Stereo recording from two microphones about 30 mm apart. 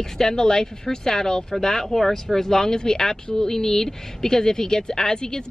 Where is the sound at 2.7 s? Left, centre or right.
Left.